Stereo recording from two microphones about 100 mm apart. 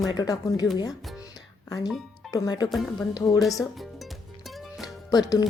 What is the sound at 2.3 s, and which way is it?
Speech, 40° left (ahead or behind).